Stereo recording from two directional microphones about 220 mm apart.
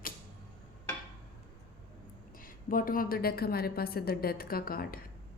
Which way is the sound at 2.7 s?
40° left (ahead or behind).